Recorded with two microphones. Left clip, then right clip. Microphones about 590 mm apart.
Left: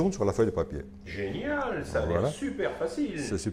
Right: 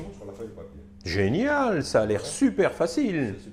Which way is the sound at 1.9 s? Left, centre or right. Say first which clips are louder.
Right 3 dB; right.